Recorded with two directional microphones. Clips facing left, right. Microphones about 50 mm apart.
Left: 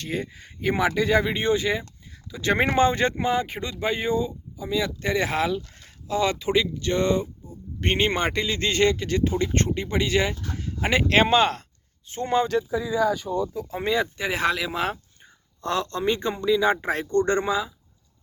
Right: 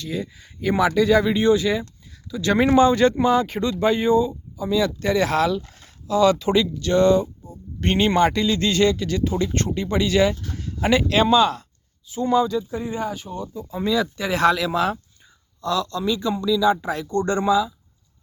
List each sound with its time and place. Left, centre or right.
0.0 s a man's voice: left
6.4 s a man's voice: centre
11.1 s speech: left
13.3 s speech: centre
13.7 s speech: left
14.2 s a man's voice: centre
15.6 s speech: left